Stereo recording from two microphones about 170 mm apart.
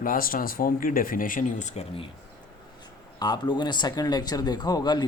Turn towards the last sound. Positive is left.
turn(degrees=25)  # may be behind; listen again after turning